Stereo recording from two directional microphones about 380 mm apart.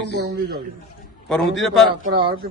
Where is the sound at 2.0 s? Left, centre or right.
Right.